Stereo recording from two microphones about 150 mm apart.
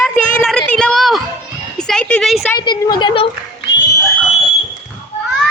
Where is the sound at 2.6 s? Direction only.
30° left (ahead or behind).